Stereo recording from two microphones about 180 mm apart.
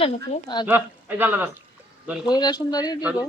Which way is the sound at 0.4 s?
25° left (ahead or behind).